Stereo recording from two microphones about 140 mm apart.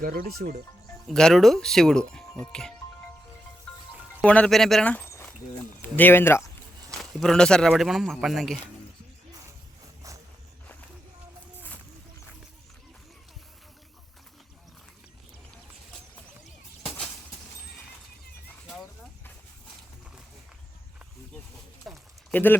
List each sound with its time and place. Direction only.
0.0 s speech: 90° right
1.0 s speech: 5° left (ahead or behind)
4.2 s speech: 10° left (ahead or behind)
5.0 s a sound: 20° left (ahead or behind)
6.0 s speech: 15° left (ahead or behind)
7.0 s speech: 5° left (ahead or behind)
21.9 s a sound: centre (ahead or behind)
22.3 s speech: 15° left (ahead or behind)